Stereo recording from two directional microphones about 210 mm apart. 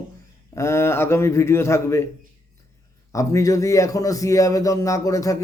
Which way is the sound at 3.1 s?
15° left (ahead or behind).